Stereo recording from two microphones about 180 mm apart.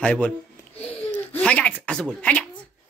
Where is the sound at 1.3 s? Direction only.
5° left (ahead or behind).